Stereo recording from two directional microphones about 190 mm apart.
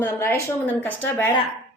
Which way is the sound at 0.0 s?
10° left (ahead or behind).